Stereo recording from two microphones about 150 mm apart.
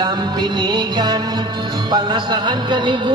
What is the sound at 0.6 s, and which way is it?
Music, 30° right (ahead or behind).